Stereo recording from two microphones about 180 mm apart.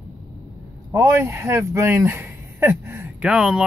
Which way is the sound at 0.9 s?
15° right (ahead or behind).